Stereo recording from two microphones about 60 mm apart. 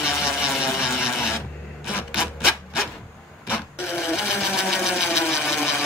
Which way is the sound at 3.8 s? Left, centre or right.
Centre.